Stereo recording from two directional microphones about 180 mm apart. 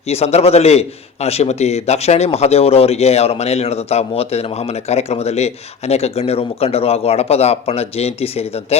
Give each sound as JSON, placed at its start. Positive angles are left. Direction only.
{"t": 0.1, "sound": "a man's voice", "side_deg": 35}